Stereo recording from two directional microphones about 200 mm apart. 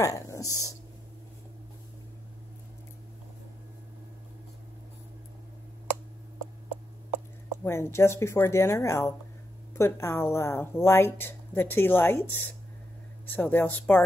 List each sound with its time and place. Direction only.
0.0 s speech: 15° left (ahead or behind)
7.6 s speech: 10° left (ahead or behind)